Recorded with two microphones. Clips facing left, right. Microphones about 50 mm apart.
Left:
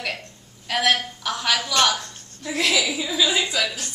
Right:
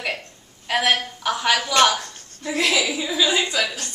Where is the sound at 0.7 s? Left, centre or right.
Centre.